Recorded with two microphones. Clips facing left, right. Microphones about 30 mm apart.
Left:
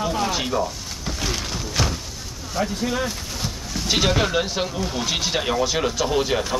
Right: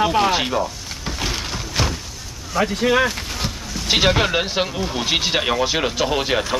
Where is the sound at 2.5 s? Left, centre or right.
Right.